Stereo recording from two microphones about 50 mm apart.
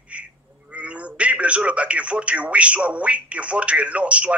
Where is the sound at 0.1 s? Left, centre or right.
Right.